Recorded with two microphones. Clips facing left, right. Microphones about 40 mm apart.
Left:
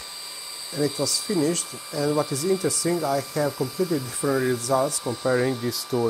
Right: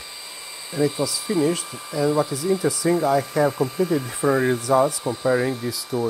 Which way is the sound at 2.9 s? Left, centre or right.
Right.